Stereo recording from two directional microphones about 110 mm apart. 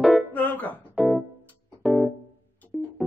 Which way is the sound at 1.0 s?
Centre (ahead or behind).